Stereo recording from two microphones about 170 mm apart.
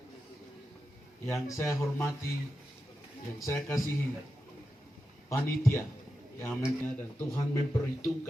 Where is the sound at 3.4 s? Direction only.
15° left (ahead or behind).